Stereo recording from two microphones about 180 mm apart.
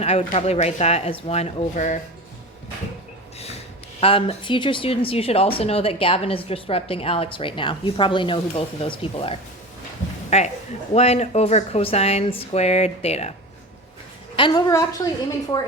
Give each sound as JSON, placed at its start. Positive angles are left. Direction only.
{"t": 0.0, "sound": "a woman's voice", "side_deg": 35}
{"t": 3.3, "sound": "snort", "side_deg": 35}
{"t": 4.0, "sound": "a woman's voice", "side_deg": 30}
{"t": 14.3, "sound": "a woman's voice", "side_deg": 30}